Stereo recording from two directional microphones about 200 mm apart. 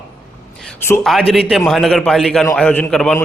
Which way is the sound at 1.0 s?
Centre (ahead or behind).